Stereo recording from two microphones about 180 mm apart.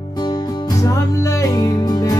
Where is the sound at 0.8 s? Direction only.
20° left (ahead or behind).